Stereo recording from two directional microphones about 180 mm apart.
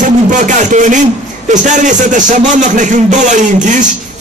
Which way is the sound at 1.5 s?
45° right (ahead or behind).